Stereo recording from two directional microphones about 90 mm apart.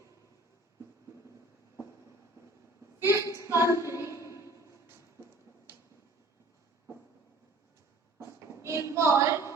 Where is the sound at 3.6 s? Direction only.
30° right (ahead or behind).